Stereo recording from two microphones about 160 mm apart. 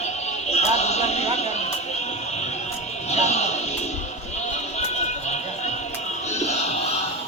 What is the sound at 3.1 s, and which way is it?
Music, 45° left (ahead or behind).